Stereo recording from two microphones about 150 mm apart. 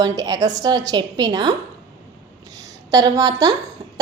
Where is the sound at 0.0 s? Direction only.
25° right (ahead or behind).